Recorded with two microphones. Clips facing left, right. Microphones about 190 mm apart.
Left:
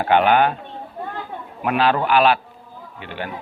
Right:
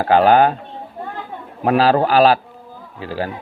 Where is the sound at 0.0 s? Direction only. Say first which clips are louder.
Right 4 dB; 35° right (ahead or behind).